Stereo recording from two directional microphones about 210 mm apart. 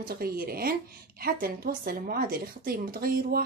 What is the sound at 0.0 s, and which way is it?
Speech, 45° right (ahead or behind).